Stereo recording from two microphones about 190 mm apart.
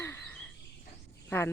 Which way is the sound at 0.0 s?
10° left (ahead or behind).